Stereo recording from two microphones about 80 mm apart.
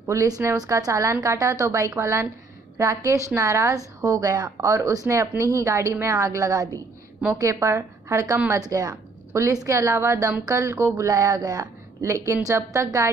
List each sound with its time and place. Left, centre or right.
0.0 s a woman's voice: right
7.3 s a woman's voice: right
8.5 s a woman's voice: right
9.3 s a woman's voice: right